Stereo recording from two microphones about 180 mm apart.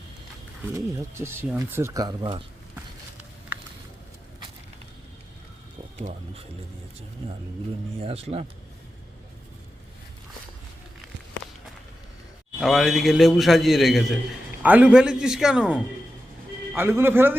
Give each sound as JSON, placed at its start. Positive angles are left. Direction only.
{"t": 0.6, "sound": "speech", "side_deg": -15}
{"t": 7.2, "sound": "speech", "side_deg": -30}
{"t": 12.5, "sound": "a man's voice", "side_deg": 0}